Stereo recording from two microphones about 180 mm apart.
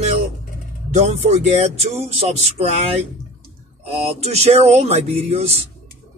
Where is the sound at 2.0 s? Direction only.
35° right (ahead or behind).